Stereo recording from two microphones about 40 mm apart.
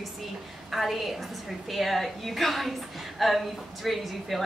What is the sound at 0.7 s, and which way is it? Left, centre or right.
Speech, centre.